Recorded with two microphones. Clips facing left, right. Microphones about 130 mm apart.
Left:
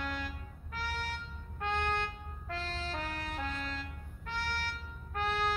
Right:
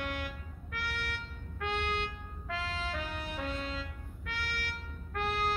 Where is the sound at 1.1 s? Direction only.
75° right (ahead or behind).